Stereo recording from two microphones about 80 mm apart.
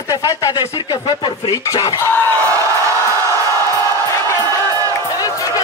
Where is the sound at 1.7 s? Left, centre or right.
Left.